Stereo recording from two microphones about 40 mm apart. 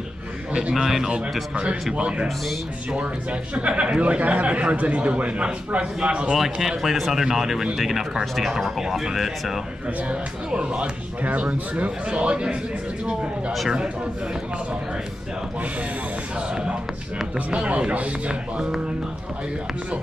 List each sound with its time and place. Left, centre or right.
0.7 s speech: centre
1.5 s music: right
2.9 s speech: right
6.0 s music: right
6.3 s speech: centre
10.0 s speech: right
17.5 s speech: right
18.3 s music: right